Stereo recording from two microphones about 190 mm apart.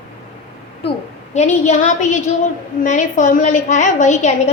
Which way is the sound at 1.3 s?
40° left (ahead or behind).